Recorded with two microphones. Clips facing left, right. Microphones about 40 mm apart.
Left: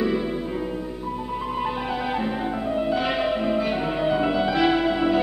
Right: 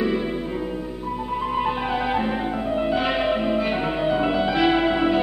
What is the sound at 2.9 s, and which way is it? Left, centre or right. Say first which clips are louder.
Music: right 2 dB; centre.